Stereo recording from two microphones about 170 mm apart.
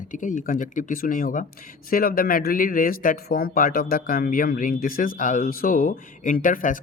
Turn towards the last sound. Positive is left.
turn(degrees=50)  # may be behind; listen again after turning